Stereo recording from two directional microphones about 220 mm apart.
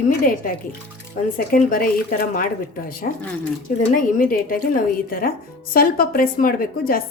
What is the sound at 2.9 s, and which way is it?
Speech, 40° left (ahead or behind).